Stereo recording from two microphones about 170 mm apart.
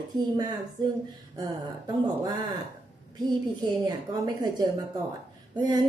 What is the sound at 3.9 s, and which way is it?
Speech, 25° right (ahead or behind).